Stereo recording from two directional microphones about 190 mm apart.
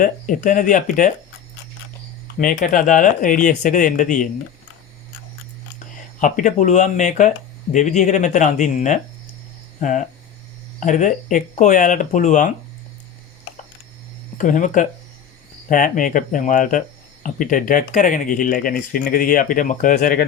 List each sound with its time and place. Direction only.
0.0 s speech: 45° left (ahead or behind)
2.2 s speech: 45° left (ahead or behind)
6.1 s speech: 40° left (ahead or behind)
10.8 s speech: 40° left (ahead or behind)
14.3 s speech: 40° left (ahead or behind)